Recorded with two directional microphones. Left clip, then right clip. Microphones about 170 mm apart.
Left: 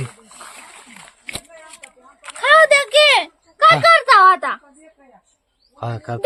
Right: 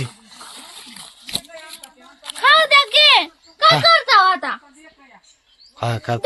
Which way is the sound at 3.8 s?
40° left (ahead or behind).